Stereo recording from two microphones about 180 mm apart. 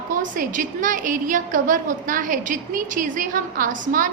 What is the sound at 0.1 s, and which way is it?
A woman's voice, 45° right (ahead or behind).